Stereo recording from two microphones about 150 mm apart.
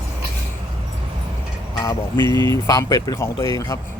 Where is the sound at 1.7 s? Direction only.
25° left (ahead or behind).